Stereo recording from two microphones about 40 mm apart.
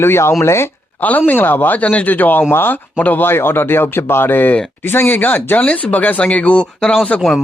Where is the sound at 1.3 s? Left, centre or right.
Left.